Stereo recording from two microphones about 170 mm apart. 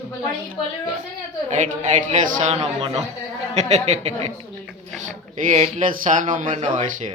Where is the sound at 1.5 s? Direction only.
45° right (ahead or behind).